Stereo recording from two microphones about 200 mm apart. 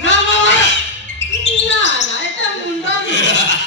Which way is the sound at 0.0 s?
65° left (ahead or behind).